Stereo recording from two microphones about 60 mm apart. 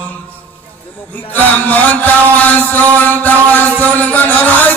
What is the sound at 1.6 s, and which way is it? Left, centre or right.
Mantra, left.